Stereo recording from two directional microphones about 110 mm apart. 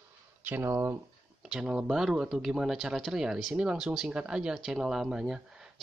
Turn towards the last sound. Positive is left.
turn(degrees=-5)  # may be behind; listen again after turning